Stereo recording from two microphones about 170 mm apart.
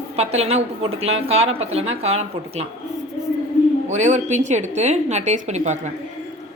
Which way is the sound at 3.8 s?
45° right (ahead or behind).